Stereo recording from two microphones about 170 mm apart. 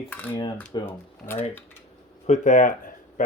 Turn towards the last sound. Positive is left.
turn(degrees=50)  # may be behind; listen again after turning